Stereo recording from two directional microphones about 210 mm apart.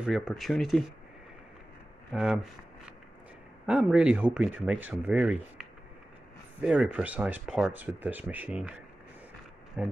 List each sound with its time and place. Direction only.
0.0 s speech: centre (ahead or behind)
2.1 s speech: 5° right (ahead or behind)
9.8 s speech: 5° right (ahead or behind)